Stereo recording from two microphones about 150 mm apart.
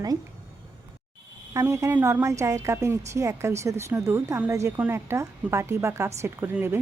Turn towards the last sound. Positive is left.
turn(degrees=-15)  # may be behind; listen again after turning